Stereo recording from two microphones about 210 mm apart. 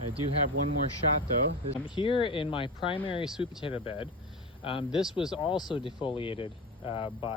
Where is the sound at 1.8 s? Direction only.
25° left (ahead or behind).